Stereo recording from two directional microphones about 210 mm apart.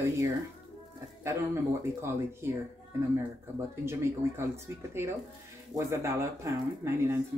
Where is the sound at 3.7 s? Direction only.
10° right (ahead or behind).